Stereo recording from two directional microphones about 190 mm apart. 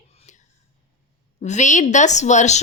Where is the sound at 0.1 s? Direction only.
35° left (ahead or behind).